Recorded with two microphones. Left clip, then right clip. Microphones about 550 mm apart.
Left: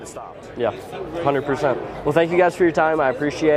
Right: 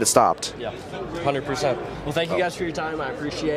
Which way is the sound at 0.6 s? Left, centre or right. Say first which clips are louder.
Left 15 dB; left.